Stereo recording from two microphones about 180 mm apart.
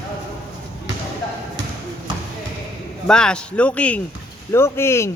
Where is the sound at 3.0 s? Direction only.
5° left (ahead or behind).